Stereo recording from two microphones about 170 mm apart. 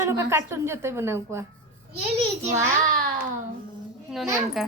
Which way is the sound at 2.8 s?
55° right (ahead or behind).